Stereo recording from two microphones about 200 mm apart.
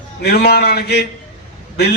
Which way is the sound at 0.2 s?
55° left (ahead or behind).